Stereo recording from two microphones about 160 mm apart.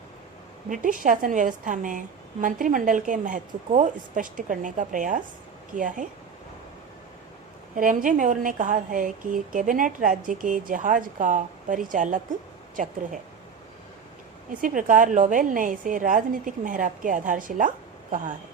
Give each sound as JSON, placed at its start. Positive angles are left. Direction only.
{"t": 0.7, "sound": "a woman's voice", "side_deg": -55}
{"t": 7.8, "sound": "a woman's voice", "side_deg": -55}
{"t": 14.6, "sound": "a woman's voice", "side_deg": -55}